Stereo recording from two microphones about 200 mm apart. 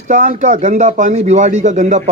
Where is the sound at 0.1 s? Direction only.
35° right (ahead or behind).